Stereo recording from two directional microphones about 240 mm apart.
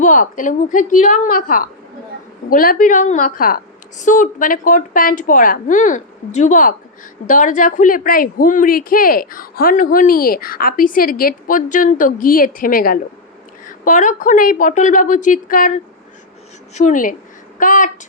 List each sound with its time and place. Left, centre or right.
0.0 s a woman's voice: left